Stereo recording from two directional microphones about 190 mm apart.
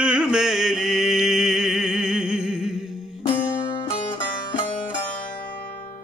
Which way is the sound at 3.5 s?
25° left (ahead or behind).